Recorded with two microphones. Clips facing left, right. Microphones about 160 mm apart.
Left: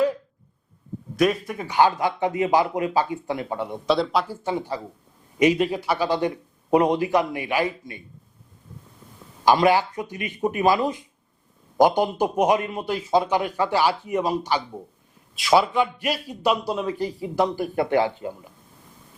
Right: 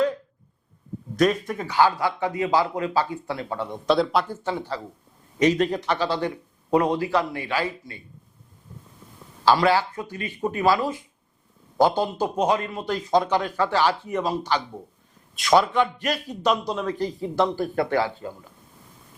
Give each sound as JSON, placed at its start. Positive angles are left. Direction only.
{"t": 1.1, "sound": "speech", "side_deg": 5}
{"t": 1.6, "sound": "a man's voice", "side_deg": 20}
{"t": 3.8, "sound": "speech", "side_deg": 0}
{"t": 4.4, "sound": "a man's voice", "side_deg": 15}
{"t": 9.4, "sound": "a man's voice", "side_deg": 15}